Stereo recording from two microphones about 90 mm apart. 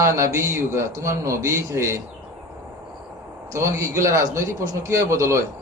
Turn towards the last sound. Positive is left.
turn(degrees=-30)  # may be behind; listen again after turning